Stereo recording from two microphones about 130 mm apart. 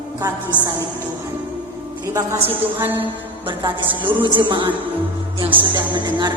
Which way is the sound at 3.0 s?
40° right (ahead or behind).